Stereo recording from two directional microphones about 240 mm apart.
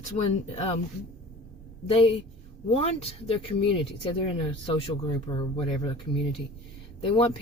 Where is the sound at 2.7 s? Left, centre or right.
Left.